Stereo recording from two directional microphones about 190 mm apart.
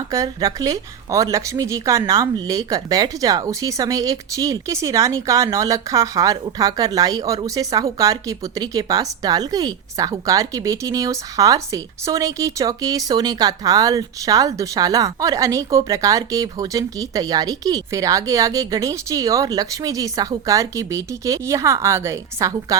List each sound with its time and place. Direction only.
0.1 s speech: 20° right (ahead or behind)